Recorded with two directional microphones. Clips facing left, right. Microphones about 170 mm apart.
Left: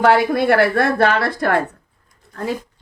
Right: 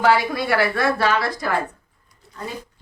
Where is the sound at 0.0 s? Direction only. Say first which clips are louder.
Left 4 dB; 55° left (ahead or behind).